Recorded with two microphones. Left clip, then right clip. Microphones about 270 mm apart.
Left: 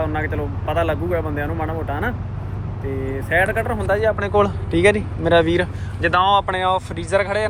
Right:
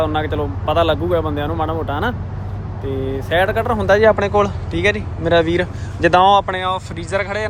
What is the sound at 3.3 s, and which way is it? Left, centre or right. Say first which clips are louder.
Speech: right 2 dB; centre.